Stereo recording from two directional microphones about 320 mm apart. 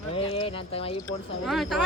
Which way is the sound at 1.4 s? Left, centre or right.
Centre.